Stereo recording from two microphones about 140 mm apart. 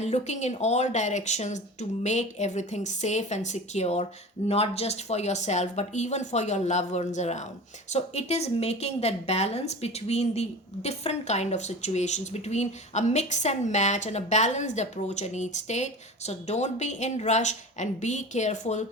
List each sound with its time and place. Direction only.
0.0 s a woman's voice: 55° left (ahead or behind)